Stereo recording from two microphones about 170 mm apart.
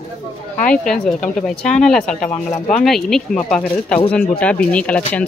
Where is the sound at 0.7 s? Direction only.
5° left (ahead or behind).